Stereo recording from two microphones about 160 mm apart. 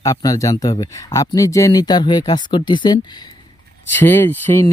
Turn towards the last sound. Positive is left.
turn(degrees=15)  # may be behind; listen again after turning